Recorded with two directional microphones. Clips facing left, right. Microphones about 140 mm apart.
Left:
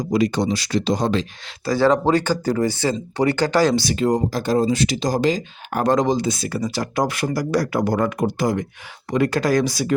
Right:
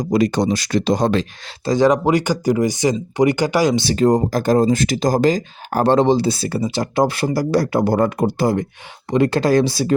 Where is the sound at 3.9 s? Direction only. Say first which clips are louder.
Right 4 dB; 45° right (ahead or behind).